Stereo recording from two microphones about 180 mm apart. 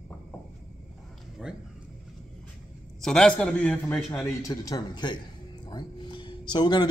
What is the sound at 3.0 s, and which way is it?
A man's voice, 5° left (ahead or behind).